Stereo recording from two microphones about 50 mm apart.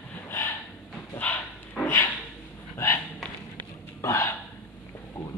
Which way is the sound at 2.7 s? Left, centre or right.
Left.